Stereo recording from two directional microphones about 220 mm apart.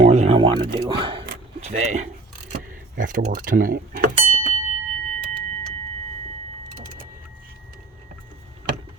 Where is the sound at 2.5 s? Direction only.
35° right (ahead or behind).